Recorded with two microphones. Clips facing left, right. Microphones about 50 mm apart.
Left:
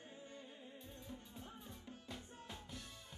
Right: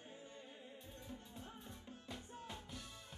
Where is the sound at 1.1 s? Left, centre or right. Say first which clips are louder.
Right 1 dB; centre.